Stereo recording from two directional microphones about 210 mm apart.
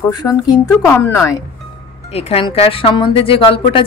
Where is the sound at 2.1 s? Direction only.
30° left (ahead or behind).